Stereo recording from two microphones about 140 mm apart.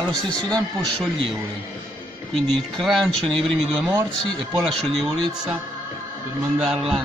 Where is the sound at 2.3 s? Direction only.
Centre (ahead or behind).